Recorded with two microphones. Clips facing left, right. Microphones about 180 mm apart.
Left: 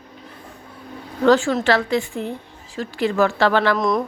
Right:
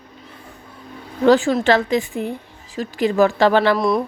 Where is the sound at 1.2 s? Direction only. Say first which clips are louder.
Right 2 dB; 15° right (ahead or behind).